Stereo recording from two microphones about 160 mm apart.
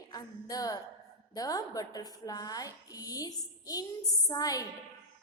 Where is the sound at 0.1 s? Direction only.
25° left (ahead or behind).